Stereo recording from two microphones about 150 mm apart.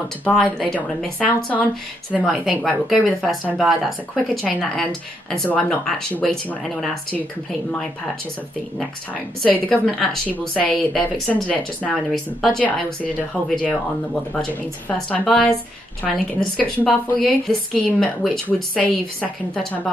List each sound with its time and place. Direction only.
0.2 s a woman's voice: 10° left (ahead or behind)
9.7 s a woman's voice: 5° left (ahead or behind)
14.3 s a woman's voice: 10° left (ahead or behind)